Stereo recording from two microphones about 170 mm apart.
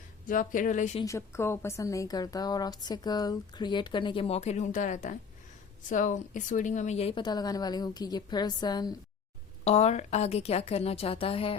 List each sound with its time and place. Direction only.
0.3 s speech: 50° left (ahead or behind)
1.0 s a woman's voice: 15° left (ahead or behind)
9.6 s a woman's voice: 40° left (ahead or behind)